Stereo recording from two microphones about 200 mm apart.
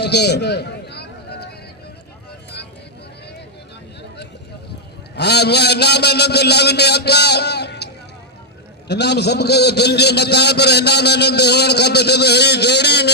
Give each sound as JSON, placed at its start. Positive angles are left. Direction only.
{"t": 0.0, "sound": "a sound", "side_deg": 55}
{"t": 5.1, "sound": "a man's voice", "side_deg": 55}
{"t": 8.9, "sound": "a man's voice", "side_deg": 55}